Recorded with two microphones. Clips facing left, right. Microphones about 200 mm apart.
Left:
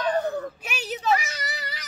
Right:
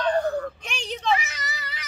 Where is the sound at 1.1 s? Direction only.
40° left (ahead or behind).